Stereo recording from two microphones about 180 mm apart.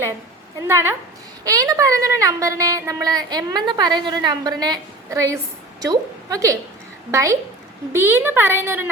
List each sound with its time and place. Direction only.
0.7 s a woman's voice: 15° right (ahead or behind)